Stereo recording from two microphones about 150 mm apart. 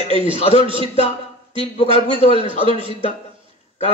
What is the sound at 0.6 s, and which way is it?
Speech, 35° right (ahead or behind).